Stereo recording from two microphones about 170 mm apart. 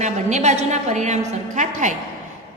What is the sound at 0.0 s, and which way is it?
A woman's voice, 45° right (ahead or behind).